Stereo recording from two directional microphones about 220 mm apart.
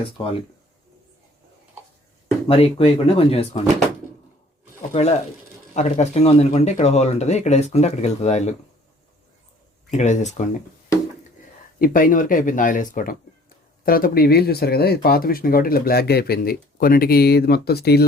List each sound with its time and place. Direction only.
2.5 s speech: 25° left (ahead or behind)
4.9 s speech: 30° left (ahead or behind)
9.9 s speech: 30° left (ahead or behind)
11.8 s speech: 40° left (ahead or behind)